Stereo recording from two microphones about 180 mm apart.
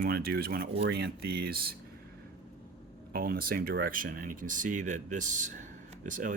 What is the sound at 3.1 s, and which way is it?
A man's voice, 55° right (ahead or behind).